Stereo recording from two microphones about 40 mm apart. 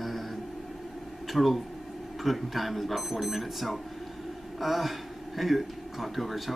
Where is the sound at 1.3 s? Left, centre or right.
Centre.